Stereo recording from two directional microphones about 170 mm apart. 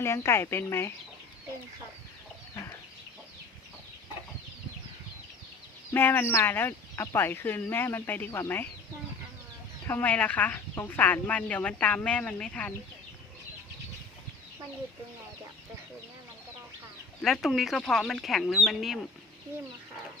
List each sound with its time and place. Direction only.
0.0 s speech: 15° left (ahead or behind)
5.9 s speech: 10° left (ahead or behind)
9.8 s speech: 10° left (ahead or behind)
17.2 s speech: centre (ahead or behind)